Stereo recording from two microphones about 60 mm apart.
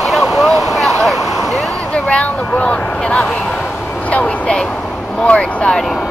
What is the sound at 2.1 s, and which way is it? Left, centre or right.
Speech, left.